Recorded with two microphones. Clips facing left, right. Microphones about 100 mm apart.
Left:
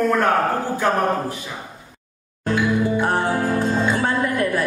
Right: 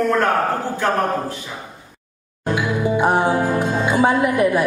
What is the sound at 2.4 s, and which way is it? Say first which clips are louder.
Music: left 1 dB; 15° right (ahead or behind).